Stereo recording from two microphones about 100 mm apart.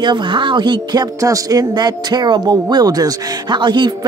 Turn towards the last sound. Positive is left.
turn(degrees=-50)  # may be behind; listen again after turning